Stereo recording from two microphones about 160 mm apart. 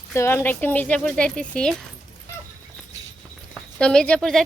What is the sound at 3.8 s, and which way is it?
Speech, 5° left (ahead or behind).